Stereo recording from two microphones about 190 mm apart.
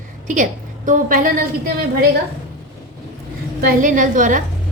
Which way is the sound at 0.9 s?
45° right (ahead or behind).